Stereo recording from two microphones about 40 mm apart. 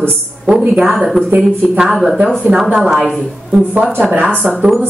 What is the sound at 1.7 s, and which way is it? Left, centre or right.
Speech, centre.